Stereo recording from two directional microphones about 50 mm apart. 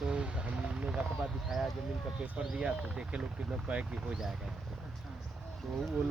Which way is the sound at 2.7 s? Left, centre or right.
Right.